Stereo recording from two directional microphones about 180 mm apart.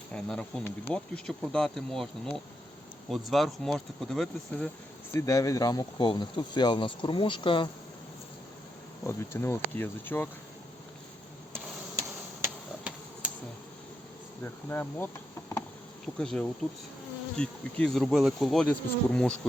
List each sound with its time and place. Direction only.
0.1 s insect: 5° left (ahead or behind)
5.1 s speech: 20° left (ahead or behind)
9.0 s speech: 15° left (ahead or behind)
11.5 s a sound: 15° right (ahead or behind)
14.4 s speech: 10° left (ahead or behind)
16.1 s insect: 5° left (ahead or behind)